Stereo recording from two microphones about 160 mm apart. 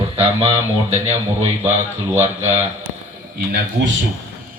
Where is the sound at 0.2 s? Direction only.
40° right (ahead or behind).